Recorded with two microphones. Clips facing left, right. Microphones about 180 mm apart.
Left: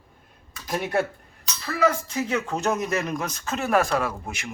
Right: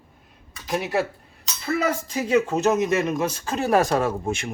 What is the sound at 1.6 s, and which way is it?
Speech, 20° right (ahead or behind).